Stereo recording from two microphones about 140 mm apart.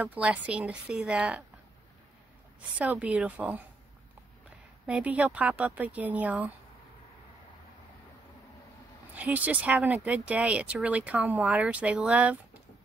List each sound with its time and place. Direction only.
0.0 s speech: 10° right (ahead or behind)
2.8 s speech: 10° right (ahead or behind)
4.8 s speech: 10° right (ahead or behind)
9.1 s speech: 10° right (ahead or behind)